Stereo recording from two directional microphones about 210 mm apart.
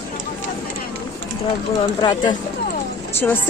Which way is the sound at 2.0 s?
20° left (ahead or behind).